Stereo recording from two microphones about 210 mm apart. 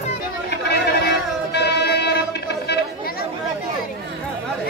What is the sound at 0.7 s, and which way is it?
Music, 50° left (ahead or behind).